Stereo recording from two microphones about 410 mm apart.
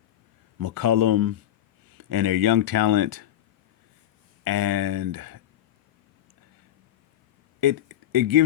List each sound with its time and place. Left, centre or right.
0.6 s speech: right
4.4 s speech: right
7.6 s speech: right